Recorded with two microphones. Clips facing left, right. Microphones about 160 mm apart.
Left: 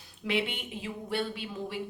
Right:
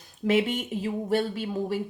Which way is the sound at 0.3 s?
45° right (ahead or behind).